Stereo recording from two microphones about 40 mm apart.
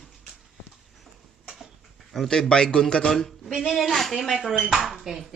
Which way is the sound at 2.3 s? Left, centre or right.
Centre.